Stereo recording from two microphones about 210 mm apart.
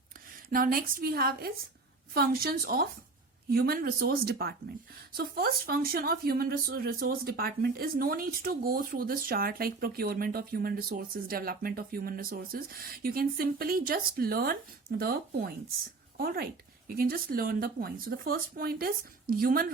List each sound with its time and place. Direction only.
0.5 s speech: 45° right (ahead or behind)